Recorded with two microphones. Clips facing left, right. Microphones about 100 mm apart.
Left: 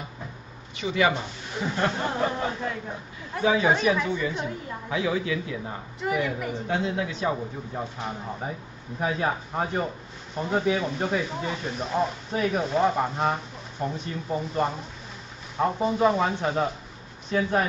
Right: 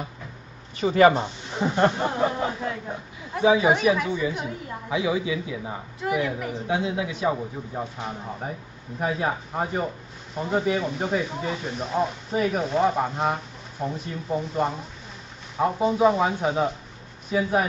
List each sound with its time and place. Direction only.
0.7 s speech: 40° right (ahead or behind)
1.6 s speech: 25° right (ahead or behind)
2.0 s a woman's voice: 10° right (ahead or behind)